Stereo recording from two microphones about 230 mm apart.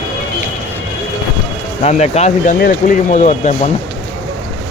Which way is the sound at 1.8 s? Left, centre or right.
Left.